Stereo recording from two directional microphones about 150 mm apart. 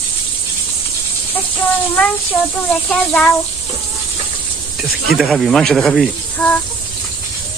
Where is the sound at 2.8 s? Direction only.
5° left (ahead or behind).